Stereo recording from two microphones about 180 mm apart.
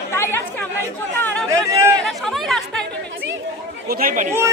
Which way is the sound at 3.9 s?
50° right (ahead or behind).